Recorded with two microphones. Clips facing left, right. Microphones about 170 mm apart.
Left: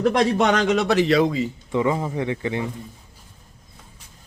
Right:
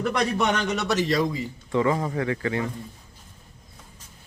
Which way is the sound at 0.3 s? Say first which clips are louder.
Left 6 dB; 90° left.